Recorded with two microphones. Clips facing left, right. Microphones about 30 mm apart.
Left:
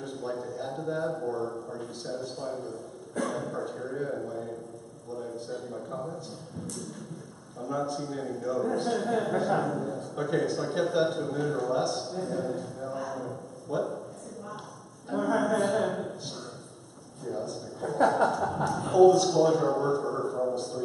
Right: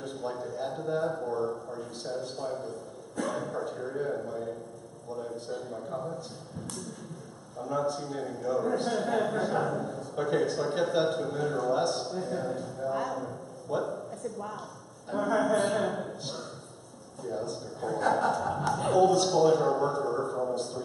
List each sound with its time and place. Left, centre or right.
0.0 s a man's voice: centre
7.5 s a man's voice: centre
15.0 s a man's voice: centre
15.5 s a woman's voice: right
15.8 s a man's voice: centre